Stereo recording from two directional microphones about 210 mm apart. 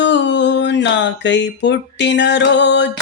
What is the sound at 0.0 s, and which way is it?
Music, 55° left (ahead or behind).